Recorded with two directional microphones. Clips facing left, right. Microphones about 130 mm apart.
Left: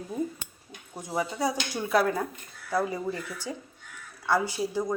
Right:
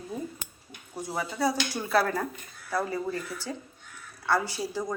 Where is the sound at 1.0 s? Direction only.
20° left (ahead or behind).